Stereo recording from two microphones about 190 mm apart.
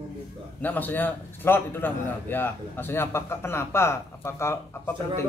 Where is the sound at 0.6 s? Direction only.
10° left (ahead or behind).